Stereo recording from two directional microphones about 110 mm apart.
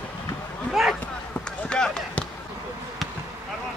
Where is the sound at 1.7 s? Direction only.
5° left (ahead or behind).